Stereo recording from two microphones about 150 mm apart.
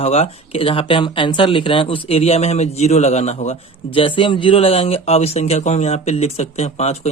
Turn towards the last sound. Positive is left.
turn(degrees=45)  # may be behind; listen again after turning